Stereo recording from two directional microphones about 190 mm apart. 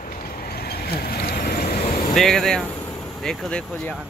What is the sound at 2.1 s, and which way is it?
Speech, centre (ahead or behind).